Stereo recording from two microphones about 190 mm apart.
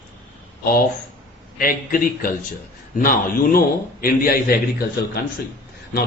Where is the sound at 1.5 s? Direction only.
45° left (ahead or behind).